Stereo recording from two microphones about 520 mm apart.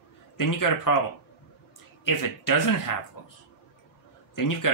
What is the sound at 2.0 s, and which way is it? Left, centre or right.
Speech, left.